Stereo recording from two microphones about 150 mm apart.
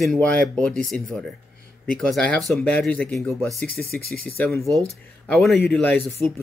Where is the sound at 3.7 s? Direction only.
90° left.